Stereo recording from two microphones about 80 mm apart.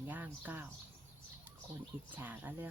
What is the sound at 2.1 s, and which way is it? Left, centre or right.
Speech, right.